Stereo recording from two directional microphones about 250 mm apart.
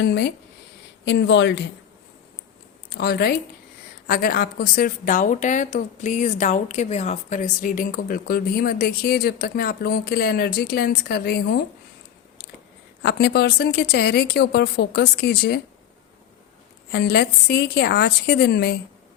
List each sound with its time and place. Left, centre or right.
0.0 s speech: left
2.9 s a woman's voice: left
13.0 s a woman's voice: left
16.9 s a woman's voice: left